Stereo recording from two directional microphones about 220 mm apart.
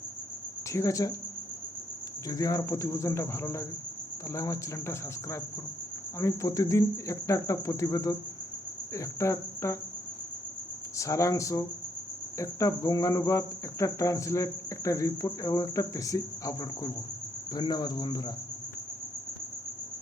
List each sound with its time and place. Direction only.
0.7 s cricket: 15° left (ahead or behind)
2.2 s cricket: 15° left (ahead or behind)
10.9 s cricket: 15° left (ahead or behind)